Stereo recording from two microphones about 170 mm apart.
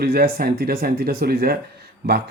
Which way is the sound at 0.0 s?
60° right (ahead or behind).